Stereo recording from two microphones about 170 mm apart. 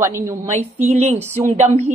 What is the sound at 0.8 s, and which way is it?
Speech, 40° right (ahead or behind).